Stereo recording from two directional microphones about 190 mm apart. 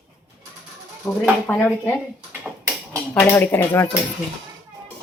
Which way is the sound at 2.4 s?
10° right (ahead or behind).